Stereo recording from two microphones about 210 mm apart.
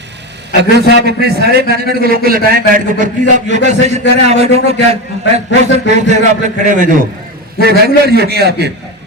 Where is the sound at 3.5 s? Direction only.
35° right (ahead or behind).